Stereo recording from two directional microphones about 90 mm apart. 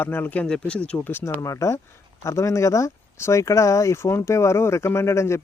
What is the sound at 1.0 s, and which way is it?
Speech, 25° left (ahead or behind).